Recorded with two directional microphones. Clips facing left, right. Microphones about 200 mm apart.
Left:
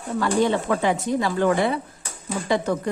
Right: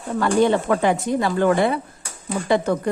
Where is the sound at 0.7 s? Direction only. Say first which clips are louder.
Right 2 dB; 50° right (ahead or behind).